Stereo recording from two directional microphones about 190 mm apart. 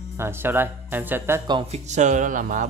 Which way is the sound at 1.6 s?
35° right (ahead or behind).